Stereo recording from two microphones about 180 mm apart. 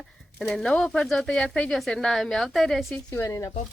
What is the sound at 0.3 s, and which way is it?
A man's voice, 5° left (ahead or behind).